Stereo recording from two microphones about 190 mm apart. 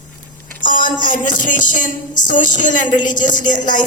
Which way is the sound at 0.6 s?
45° left (ahead or behind).